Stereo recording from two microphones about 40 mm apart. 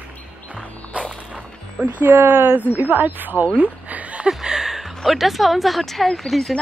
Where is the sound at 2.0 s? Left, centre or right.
Right.